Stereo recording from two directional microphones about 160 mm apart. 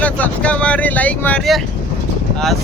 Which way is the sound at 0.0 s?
10° left (ahead or behind).